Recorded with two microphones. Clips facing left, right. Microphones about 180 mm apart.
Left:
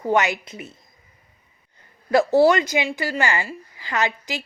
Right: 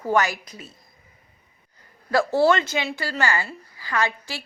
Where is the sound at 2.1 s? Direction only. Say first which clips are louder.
Left 3 dB; 20° left (ahead or behind).